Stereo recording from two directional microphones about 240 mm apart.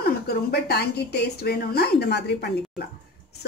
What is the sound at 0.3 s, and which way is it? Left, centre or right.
A woman's voice, left.